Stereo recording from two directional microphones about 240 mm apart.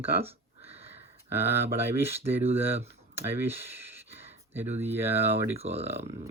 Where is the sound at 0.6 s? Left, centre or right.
Right.